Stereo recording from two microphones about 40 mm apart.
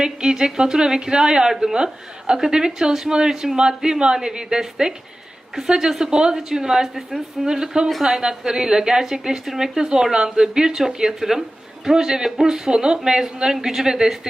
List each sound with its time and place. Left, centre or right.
0.0 s a woman's voice: centre